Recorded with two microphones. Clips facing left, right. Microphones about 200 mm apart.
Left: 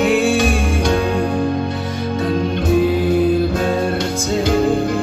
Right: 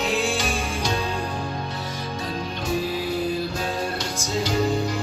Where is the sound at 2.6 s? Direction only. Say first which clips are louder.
Left 10 dB; 60° left (ahead or behind).